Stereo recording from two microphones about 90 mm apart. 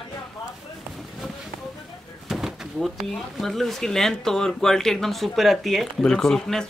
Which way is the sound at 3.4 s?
Centre (ahead or behind).